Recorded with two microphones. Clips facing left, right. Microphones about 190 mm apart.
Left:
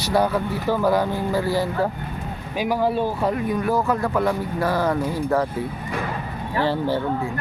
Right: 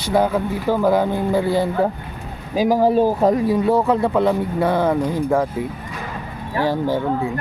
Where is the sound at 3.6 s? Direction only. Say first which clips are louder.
Right 5 dB; 25° right (ahead or behind).